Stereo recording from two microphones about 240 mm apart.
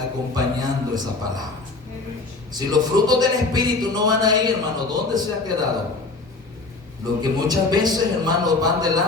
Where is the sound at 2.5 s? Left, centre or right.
Centre.